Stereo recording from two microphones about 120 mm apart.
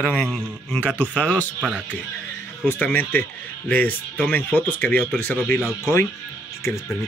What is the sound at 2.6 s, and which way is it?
Speech, 15° left (ahead or behind).